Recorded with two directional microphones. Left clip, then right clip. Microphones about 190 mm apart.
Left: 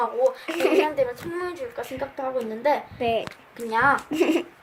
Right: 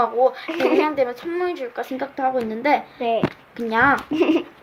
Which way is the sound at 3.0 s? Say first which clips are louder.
Right 2 dB; 5° left (ahead or behind).